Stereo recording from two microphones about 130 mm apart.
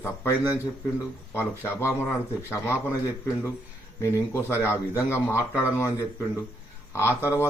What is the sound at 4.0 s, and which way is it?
Speech, 20° left (ahead or behind).